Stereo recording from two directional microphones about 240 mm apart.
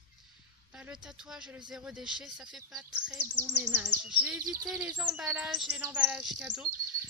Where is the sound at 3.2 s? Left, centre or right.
Right.